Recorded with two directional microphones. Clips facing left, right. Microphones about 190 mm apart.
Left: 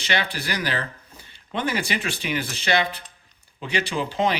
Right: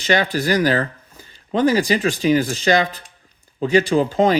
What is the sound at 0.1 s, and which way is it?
Speech, 45° right (ahead or behind).